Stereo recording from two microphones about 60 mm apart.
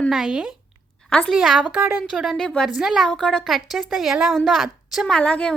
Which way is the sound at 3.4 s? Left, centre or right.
Centre.